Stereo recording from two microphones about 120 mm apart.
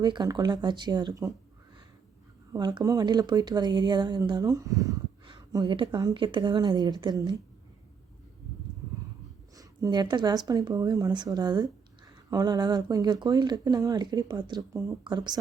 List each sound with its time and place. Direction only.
0.0 s speech: 35° right (ahead or behind)
2.5 s speech: 35° right (ahead or behind)
4.4 s speech: 30° right (ahead or behind)
9.6 s speech: 35° right (ahead or behind)
14.7 s speech: 25° right (ahead or behind)
15.0 s speech: 35° right (ahead or behind)